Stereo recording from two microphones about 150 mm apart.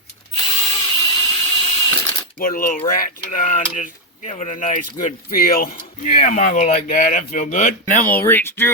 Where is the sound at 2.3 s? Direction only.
70° left (ahead or behind).